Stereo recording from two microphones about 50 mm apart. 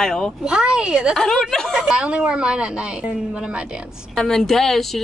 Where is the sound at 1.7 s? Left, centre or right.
Centre.